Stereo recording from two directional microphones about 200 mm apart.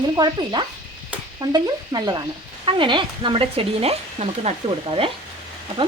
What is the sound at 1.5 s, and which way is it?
Speech, 20° right (ahead or behind).